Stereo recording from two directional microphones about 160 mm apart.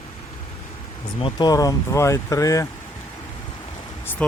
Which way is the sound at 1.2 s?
25° left (ahead or behind).